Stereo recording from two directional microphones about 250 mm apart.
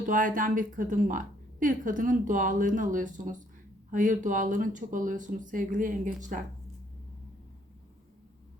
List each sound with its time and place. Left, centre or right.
0.1 s a woman's voice: right